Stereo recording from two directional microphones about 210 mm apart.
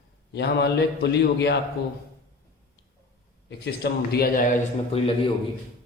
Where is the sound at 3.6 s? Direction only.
50° left (ahead or behind).